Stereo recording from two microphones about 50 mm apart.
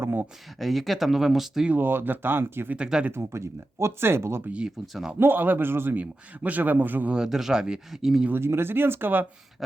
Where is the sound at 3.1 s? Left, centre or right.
Right.